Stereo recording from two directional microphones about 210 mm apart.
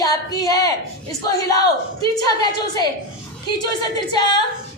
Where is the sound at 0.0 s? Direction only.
15° left (ahead or behind).